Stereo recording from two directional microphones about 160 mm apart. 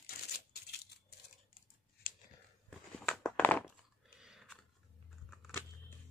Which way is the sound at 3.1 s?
10° left (ahead or behind).